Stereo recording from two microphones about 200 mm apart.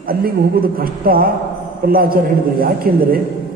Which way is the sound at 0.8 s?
45° right (ahead or behind).